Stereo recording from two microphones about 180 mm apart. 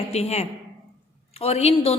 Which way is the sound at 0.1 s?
35° left (ahead or behind).